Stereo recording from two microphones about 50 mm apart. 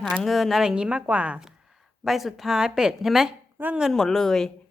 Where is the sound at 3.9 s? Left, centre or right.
Centre.